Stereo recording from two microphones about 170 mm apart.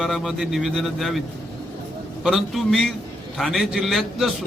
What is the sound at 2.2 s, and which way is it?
A man's voice, centre (ahead or behind).